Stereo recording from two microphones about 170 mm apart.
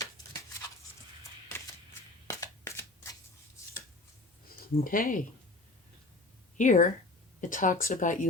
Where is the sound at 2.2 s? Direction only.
20° left (ahead or behind).